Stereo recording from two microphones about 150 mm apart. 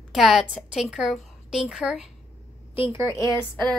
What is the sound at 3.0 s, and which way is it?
Speech, 20° left (ahead or behind).